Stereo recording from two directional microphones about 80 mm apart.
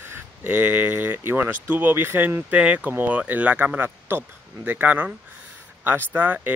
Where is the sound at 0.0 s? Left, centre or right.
Right.